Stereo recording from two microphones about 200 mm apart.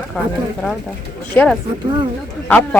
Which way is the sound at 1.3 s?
5° left (ahead or behind).